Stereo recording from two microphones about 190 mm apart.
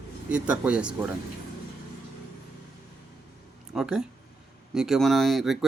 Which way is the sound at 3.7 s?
5° right (ahead or behind).